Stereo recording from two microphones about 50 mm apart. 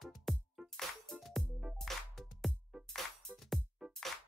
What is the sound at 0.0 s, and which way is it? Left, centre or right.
Music, centre.